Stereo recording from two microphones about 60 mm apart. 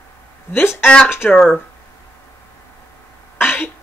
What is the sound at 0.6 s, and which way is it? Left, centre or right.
Speech, left.